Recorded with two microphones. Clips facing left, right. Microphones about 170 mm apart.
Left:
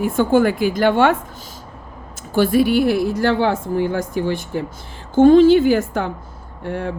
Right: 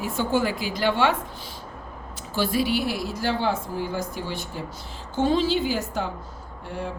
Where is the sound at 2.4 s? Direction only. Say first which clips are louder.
Left 9 dB; 55° left (ahead or behind).